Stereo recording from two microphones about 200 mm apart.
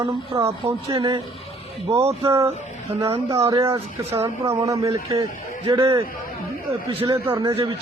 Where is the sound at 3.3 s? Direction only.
30° right (ahead or behind).